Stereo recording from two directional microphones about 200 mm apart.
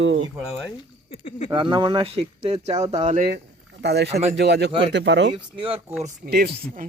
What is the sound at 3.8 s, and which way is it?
Speech, 55° right (ahead or behind).